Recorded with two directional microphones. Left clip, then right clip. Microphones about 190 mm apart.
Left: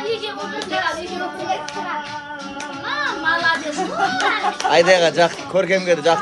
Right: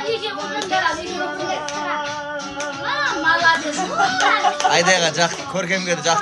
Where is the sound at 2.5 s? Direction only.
55° right (ahead or behind).